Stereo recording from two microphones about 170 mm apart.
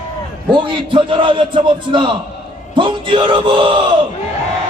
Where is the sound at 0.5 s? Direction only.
30° right (ahead or behind).